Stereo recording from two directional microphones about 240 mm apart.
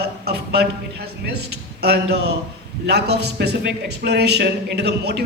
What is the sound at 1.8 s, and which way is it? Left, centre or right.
A man's voice, right.